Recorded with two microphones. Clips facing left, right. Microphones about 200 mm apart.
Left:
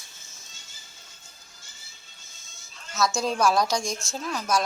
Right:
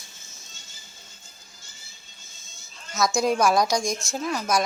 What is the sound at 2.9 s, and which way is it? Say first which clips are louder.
Speech: right 3 dB; 15° right (ahead or behind).